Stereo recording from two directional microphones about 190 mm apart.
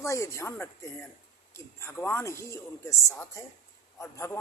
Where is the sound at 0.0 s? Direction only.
15° left (ahead or behind).